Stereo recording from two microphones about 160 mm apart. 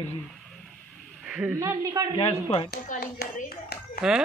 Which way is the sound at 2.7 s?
75° left (ahead or behind).